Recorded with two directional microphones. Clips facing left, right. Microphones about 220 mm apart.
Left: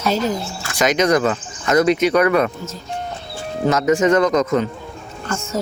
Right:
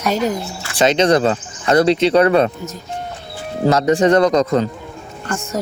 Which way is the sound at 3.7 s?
35° right (ahead or behind).